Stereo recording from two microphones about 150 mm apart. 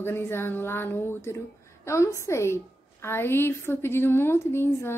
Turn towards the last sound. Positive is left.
turn(degrees=15)  # may be behind; listen again after turning